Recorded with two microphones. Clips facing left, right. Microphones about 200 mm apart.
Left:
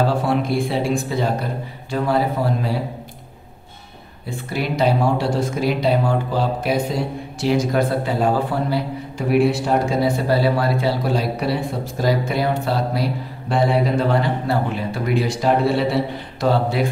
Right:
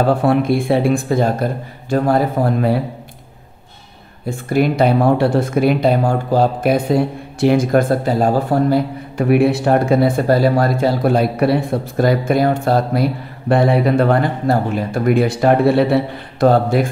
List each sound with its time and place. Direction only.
0.0 s speech: 55° right (ahead or behind)
4.5 s speech: 50° right (ahead or behind)
9.3 s speech: 60° right (ahead or behind)